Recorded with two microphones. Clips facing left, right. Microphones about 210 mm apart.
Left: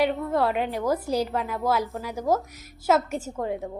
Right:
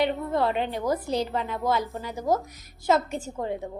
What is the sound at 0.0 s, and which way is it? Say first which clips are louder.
A woman's voice: left 1 dB; centre (ahead or behind).